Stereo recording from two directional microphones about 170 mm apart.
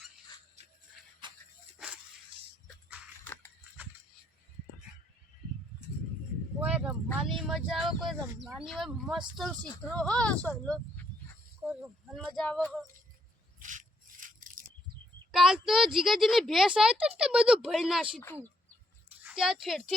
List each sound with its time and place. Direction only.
1.2 s dog: 30° right (ahead or behind)
6.6 s vehicle: 5° right (ahead or behind)
7.2 s a woman's voice: centre (ahead or behind)
11.6 s a sound: 10° right (ahead or behind)
12.1 s a woman's voice: 5° left (ahead or behind)
13.6 s a sound: 50° right (ahead or behind)
15.3 s a woman's voice: centre (ahead or behind)
19.2 s speech: 5° right (ahead or behind)